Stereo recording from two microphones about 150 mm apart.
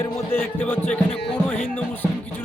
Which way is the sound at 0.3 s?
15° left (ahead or behind).